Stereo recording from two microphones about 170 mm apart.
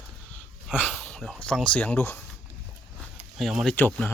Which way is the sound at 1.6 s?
10° left (ahead or behind).